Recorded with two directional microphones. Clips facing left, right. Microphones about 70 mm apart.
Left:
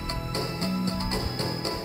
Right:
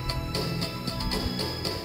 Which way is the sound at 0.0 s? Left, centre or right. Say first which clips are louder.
Left 1 dB; left.